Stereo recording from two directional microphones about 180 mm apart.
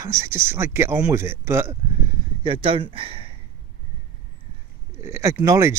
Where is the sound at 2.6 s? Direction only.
30° right (ahead or behind).